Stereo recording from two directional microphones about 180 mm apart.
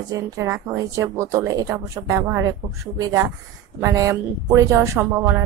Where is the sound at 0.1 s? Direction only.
15° right (ahead or behind).